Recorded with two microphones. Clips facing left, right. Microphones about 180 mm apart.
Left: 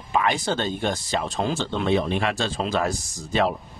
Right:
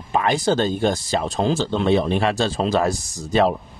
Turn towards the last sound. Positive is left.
turn(degrees=-35)  # may be behind; listen again after turning